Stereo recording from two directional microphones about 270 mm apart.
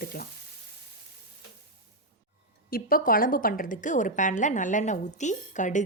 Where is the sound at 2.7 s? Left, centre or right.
Left.